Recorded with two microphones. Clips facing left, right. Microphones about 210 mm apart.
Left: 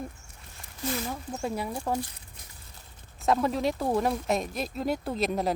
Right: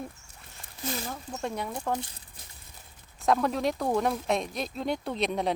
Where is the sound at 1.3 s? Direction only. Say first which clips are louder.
Left 1 dB; 5° left (ahead or behind).